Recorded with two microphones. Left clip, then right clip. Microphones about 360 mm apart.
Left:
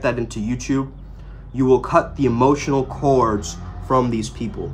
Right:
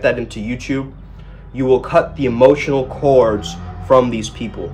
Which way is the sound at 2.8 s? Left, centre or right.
Left.